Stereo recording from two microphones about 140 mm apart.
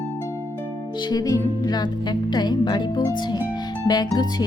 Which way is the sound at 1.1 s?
25° left (ahead or behind).